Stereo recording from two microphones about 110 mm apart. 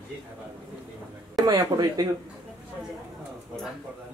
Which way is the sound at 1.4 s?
35° right (ahead or behind).